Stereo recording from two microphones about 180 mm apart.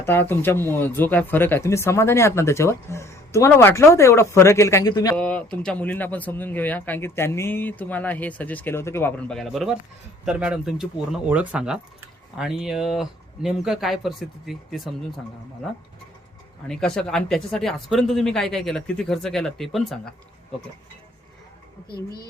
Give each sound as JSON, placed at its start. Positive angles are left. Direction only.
{"t": 0.0, "sound": "speech", "side_deg": 10}
{"t": 5.1, "sound": "speech", "side_deg": 5}
{"t": 16.6, "sound": "speech", "side_deg": 5}
{"t": 21.8, "sound": "speech", "side_deg": 60}